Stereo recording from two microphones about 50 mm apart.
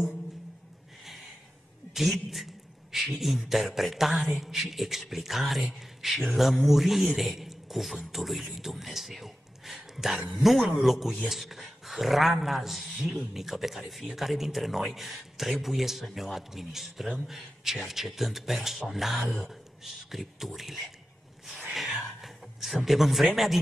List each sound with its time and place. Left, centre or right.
1.0 s a sound: centre
19.8 s a man's voice: centre
22.2 s a man's voice: centre